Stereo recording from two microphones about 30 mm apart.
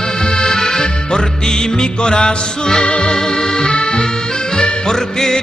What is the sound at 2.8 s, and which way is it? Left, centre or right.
Music, left.